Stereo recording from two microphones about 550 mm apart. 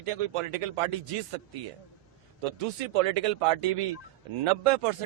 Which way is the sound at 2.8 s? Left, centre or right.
Right.